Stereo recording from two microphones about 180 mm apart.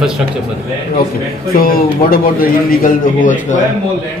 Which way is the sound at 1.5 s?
55° left (ahead or behind).